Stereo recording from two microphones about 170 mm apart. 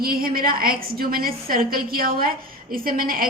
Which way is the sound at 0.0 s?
60° right (ahead or behind).